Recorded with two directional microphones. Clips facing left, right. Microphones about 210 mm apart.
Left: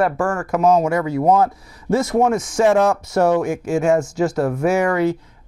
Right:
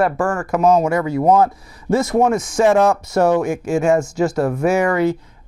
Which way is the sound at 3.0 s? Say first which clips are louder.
Right 1 dB; 10° right (ahead or behind).